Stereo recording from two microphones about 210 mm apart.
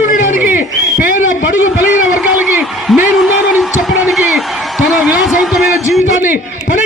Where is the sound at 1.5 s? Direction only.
10° right (ahead or behind).